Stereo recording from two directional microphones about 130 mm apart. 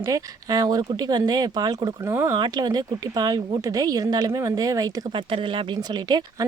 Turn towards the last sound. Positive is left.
turn(degrees=-35)  # may be behind; listen again after turning